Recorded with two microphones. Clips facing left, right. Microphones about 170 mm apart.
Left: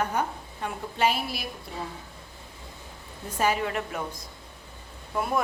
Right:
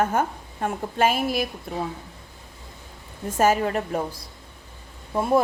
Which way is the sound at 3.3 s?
45° right (ahead or behind).